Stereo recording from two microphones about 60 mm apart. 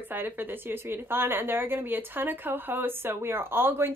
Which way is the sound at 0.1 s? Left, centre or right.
Right.